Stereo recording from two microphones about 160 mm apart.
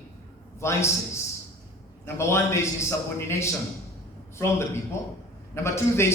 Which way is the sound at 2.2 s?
15° left (ahead or behind).